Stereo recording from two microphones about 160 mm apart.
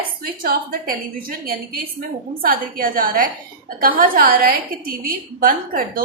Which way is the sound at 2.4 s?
65° right (ahead or behind).